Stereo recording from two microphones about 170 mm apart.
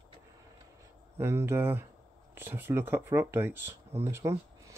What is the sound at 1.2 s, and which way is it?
Speech, 15° right (ahead or behind).